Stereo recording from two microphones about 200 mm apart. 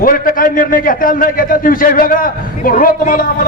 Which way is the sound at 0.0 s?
45° left (ahead or behind).